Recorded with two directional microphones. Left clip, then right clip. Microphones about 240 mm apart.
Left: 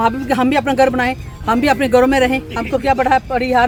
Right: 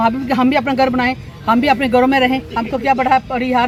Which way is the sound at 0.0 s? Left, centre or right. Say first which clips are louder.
Even; centre.